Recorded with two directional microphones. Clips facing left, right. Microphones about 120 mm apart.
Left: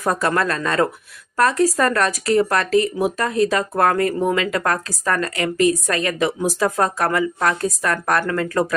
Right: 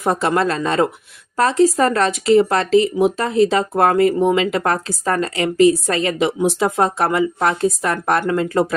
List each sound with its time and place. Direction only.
0.0 s speech: 25° right (ahead or behind)